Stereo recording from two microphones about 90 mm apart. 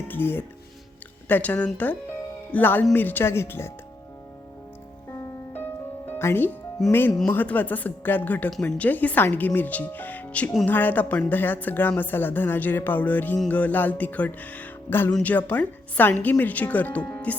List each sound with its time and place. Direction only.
0.1 s speech: 25° left (ahead or behind)
5.5 s music: 20° left (ahead or behind)
6.8 s speech: 5° left (ahead or behind)
7.3 s speech: 20° left (ahead or behind)